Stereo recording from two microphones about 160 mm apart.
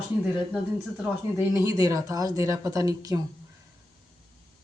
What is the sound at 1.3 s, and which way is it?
Speech, 20° right (ahead or behind).